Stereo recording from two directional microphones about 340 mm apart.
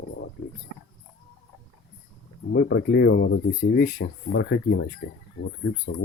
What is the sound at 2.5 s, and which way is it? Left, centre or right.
Speech, left.